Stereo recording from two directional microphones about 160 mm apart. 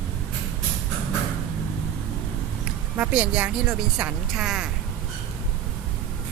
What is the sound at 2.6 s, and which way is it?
A woman's voice, 5° right (ahead or behind).